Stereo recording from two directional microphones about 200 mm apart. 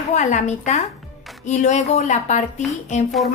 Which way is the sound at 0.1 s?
35° left (ahead or behind).